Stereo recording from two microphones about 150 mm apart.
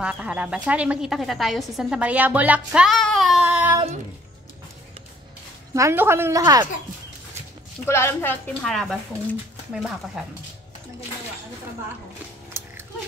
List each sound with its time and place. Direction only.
0.0 s speech: 10° right (ahead or behind)
5.7 s a woman's voice: 20° right (ahead or behind)
7.8 s a woman's voice: 15° left (ahead or behind)
8.6 s speech: 5° left (ahead or behind)
12.6 s dog: 15° right (ahead or behind)